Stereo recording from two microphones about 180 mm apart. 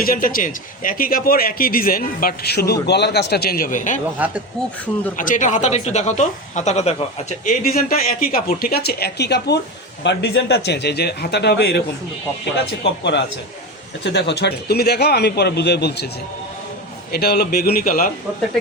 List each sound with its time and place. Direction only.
0.0 s a man's voice: 50° left (ahead or behind)
5.1 s a man's voice: 45° left (ahead or behind); by 11.8 s 65° left (ahead or behind)
12.8 s a man's voice: 75° left (ahead or behind)
17.1 s a man's voice: 65° left (ahead or behind)